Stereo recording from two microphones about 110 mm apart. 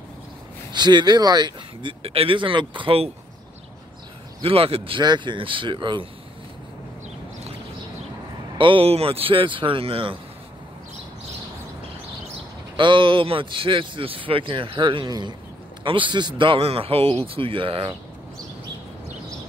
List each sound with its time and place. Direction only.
0.7 s speech: 40° right (ahead or behind)
4.4 s speech: 60° right (ahead or behind)
8.5 s speech: 55° right (ahead or behind)
12.7 s speech: 50° right (ahead or behind)